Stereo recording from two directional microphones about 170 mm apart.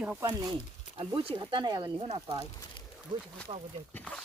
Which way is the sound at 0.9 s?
30° right (ahead or behind).